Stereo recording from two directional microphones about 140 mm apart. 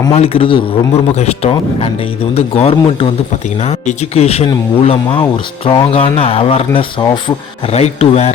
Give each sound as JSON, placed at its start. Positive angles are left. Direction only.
{"t": 0.1, "sound": "a man's voice", "side_deg": 45}